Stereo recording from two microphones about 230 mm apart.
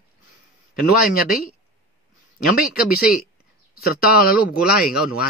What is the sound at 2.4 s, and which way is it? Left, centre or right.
Speech, left.